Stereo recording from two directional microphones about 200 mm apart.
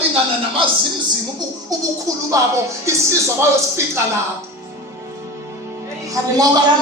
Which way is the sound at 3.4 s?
15° right (ahead or behind).